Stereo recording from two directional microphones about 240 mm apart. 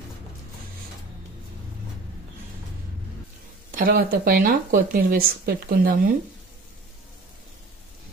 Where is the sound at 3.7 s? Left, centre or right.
Right.